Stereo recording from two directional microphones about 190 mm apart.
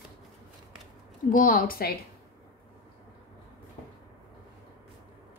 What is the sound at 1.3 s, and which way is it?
Speech, 45° left (ahead or behind).